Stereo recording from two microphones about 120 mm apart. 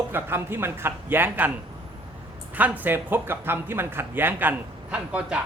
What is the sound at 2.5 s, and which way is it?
Speech, 15° right (ahead or behind).